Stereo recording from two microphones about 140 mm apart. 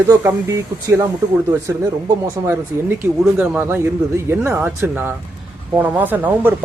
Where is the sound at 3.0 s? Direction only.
10° right (ahead or behind).